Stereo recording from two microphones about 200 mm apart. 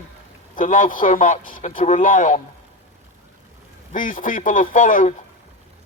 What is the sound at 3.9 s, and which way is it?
Speech, 40° left (ahead or behind).